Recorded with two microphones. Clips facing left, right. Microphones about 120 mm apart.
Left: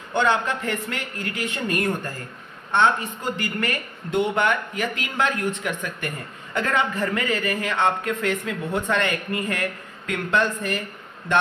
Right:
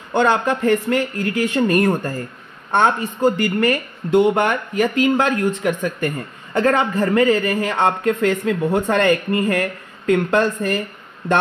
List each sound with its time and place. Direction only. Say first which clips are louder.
0.1 s speech: right 5 dB; 40° right (ahead or behind)